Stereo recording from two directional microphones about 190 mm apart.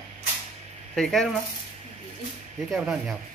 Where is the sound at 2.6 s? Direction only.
Centre (ahead or behind).